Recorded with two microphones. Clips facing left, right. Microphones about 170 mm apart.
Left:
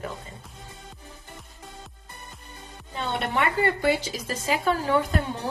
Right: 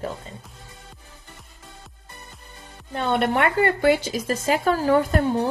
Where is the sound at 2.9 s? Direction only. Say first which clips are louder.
Right 6 dB; 55° right (ahead or behind).